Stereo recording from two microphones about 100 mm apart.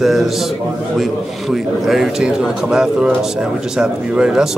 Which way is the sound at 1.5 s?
5° right (ahead or behind).